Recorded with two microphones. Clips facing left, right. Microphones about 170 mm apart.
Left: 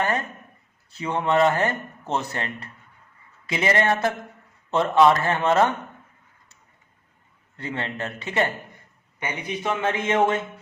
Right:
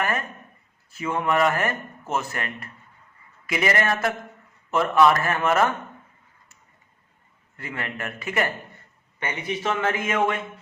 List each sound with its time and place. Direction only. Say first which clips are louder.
0.9 s speech: left 2 dB; 20° left (ahead or behind)
7.5 s speech: left 3 dB; 25° left (ahead or behind)
9.2 s speech: right 1 dB; 15° left (ahead or behind)